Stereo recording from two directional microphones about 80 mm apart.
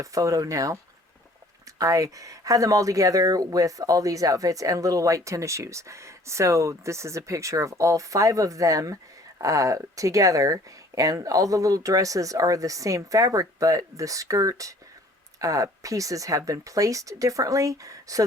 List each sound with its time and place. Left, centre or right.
0.0 s speech: right